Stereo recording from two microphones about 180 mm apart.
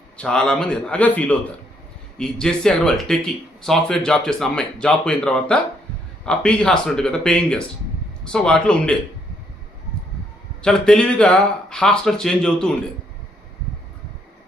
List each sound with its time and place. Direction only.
0.2 s speech: 5° left (ahead or behind)
10.6 s speech: 5° left (ahead or behind)